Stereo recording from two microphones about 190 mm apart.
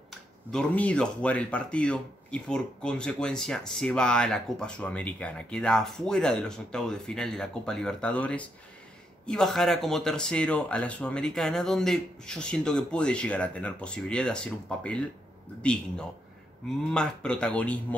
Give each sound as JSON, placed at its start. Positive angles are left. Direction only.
{"t": 0.1, "sound": "speech", "side_deg": 5}